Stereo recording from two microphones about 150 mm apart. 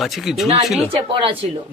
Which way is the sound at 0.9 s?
35° right (ahead or behind).